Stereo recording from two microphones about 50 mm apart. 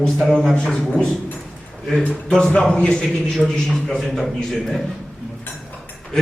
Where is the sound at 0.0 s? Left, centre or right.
Centre.